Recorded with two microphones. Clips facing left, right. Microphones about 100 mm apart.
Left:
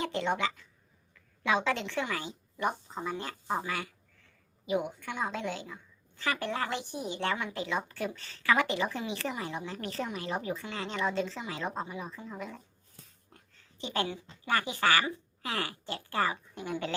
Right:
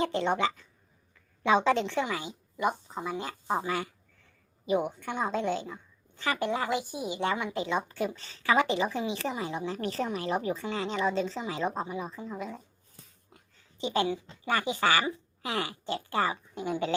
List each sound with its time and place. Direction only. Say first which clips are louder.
0.0 s a woman's voice: right 3 dB; 30° right (ahead or behind)
13.3 s a sound: even; 10° right (ahead or behind)
13.8 s a woman's voice: right 5 dB; 20° right (ahead or behind)